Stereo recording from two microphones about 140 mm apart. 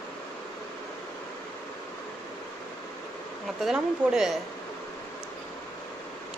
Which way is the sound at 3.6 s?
5° right (ahead or behind).